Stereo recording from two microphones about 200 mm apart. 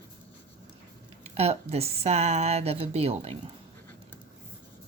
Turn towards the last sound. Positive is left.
turn(degrees=-30)  # may be behind; listen again after turning